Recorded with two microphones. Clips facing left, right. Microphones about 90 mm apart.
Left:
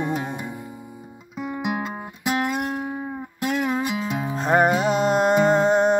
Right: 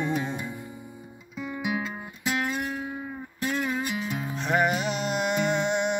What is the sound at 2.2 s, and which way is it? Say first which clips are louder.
Music: left 5 dB; 60° left (ahead or behind).